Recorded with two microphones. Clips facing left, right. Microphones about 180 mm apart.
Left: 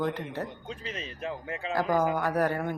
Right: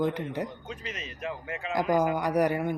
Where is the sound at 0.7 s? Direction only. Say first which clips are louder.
Left 1 dB; 35° left (ahead or behind).